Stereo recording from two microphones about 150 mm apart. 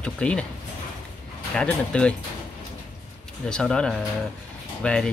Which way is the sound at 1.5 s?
5° left (ahead or behind).